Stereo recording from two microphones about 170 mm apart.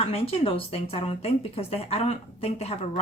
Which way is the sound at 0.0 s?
35° left (ahead or behind).